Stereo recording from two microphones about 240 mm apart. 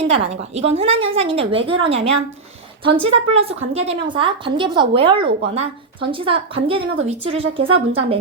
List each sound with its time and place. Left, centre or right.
0.5 s speech: right